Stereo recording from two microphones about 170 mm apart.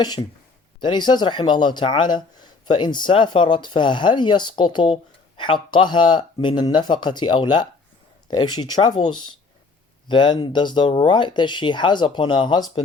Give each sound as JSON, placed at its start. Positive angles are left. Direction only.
{"t": 0.0, "sound": "speech", "side_deg": 25}